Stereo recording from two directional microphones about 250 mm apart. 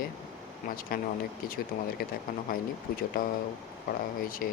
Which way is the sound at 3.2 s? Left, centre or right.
Left.